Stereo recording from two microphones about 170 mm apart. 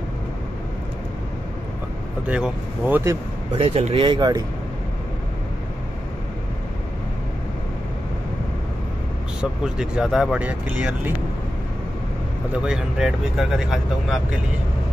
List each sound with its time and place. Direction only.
2.2 s speech: 10° right (ahead or behind)
3.5 s speech: 35° right (ahead or behind)
9.4 s speech: 5° right (ahead or behind)
12.6 s speech: 5° right (ahead or behind)